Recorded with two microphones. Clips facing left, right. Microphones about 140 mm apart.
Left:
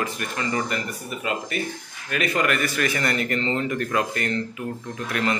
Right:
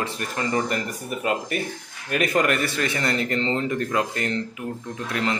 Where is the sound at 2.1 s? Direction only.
45° right (ahead or behind).